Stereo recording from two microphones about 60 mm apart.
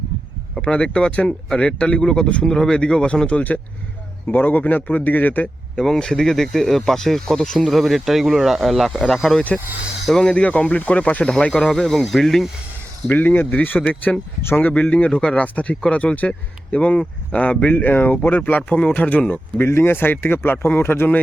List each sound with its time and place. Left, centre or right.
0.5 s speech: centre; by 5.5 s left
5.8 s speech: centre
10.2 s speech: centre
11.7 s speech: centre
13.1 s speech: left
19.6 s speech: left